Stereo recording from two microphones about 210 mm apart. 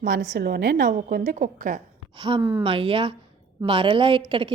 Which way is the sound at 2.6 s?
25° right (ahead or behind).